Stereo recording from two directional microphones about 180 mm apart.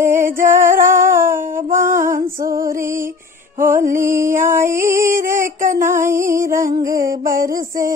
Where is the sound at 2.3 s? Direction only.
50° right (ahead or behind).